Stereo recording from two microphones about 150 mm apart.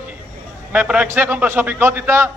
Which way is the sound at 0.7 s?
10° right (ahead or behind).